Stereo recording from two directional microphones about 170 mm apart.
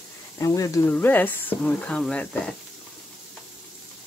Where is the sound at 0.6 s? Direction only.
20° left (ahead or behind).